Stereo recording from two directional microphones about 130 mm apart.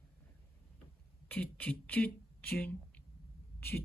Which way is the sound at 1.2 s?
10° left (ahead or behind).